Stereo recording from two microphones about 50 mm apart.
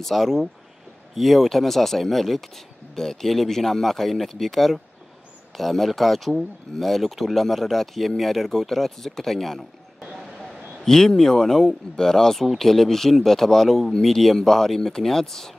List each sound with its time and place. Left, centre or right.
0.0 s speech: centre
10.9 s speech: centre